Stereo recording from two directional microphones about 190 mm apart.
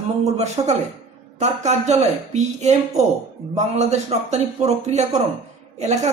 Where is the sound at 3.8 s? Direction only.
35° right (ahead or behind).